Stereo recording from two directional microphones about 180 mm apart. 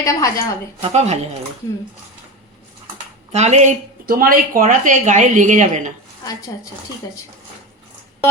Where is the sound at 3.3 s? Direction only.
40° right (ahead or behind).